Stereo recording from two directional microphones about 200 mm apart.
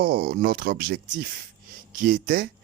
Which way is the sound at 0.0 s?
50° right (ahead or behind).